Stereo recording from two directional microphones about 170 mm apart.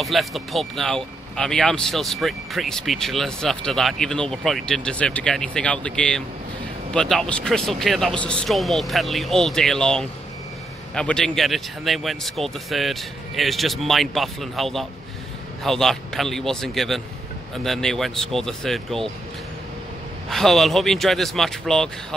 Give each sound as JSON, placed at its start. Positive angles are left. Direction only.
{"t": 0.0, "sound": "speech", "side_deg": 0}
{"t": 20.2, "sound": "speech", "side_deg": 0}